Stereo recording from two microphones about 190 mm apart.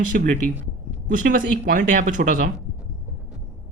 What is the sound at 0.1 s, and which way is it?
Speech, 50° right (ahead or behind).